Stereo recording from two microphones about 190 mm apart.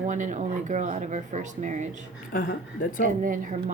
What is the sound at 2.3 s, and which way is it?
Speech, 50° left (ahead or behind).